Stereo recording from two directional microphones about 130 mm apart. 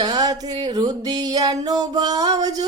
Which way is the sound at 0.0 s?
30° right (ahead or behind).